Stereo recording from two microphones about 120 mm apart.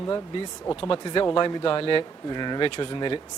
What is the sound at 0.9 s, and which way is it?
Speech, 45° left (ahead or behind).